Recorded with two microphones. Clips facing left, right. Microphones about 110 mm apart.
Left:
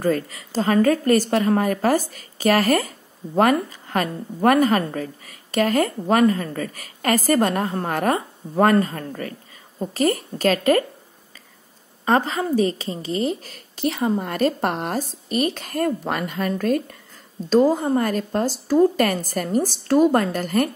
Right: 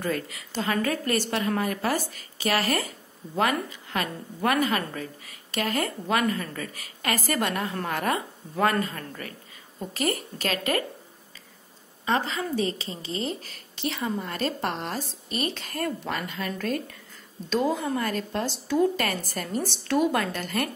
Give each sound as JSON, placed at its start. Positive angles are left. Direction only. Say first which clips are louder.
{"t": 0.0, "sound": "a woman's voice", "louder": "left 8 dB", "side_deg": 40}
{"t": 3.9, "sound": "a woman's voice", "louder": "left 7 dB", "side_deg": 45}
{"t": 12.0, "sound": "a woman's voice", "louder": "left 7 dB", "side_deg": 40}
{"t": 13.1, "sound": "speech", "louder": "left 7 dB", "side_deg": -35}
{"t": 13.5, "sound": "speech", "louder": "left 7 dB", "side_deg": 45}